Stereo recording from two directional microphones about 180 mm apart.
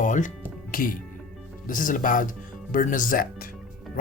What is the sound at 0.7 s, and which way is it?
Speech, 50° left (ahead or behind).